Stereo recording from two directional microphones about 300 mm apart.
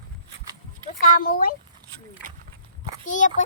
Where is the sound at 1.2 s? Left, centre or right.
Left.